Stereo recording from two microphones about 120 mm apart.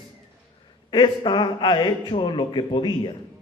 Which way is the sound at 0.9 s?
40° left (ahead or behind).